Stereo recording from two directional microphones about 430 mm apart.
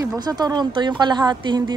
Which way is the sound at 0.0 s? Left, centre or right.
Centre.